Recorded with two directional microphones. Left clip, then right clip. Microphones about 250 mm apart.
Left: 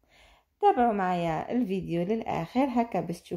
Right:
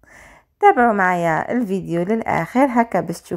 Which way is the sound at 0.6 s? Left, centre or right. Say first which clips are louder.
Right 10 dB; right.